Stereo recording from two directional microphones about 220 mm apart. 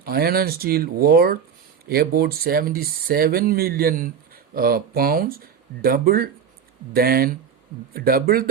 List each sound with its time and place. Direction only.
0.0 s speech: 45° right (ahead or behind)